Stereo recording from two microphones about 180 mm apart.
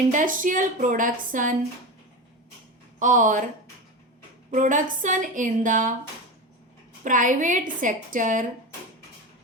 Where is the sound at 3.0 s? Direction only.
45° right (ahead or behind).